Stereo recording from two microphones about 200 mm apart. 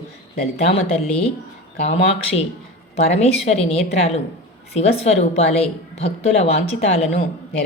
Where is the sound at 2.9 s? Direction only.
35° left (ahead or behind).